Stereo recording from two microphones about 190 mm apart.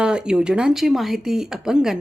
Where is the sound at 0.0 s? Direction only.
5° right (ahead or behind).